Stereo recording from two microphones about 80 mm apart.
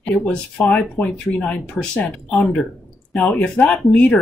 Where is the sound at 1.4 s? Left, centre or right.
Centre.